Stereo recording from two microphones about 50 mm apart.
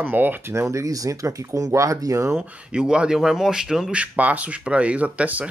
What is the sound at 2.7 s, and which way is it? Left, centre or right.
Speech, centre.